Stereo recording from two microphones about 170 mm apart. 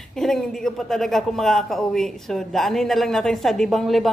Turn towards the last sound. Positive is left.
turn(degrees=0)  # may be behind; listen again after turning